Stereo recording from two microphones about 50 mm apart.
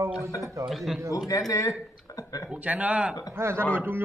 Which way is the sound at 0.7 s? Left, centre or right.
Centre.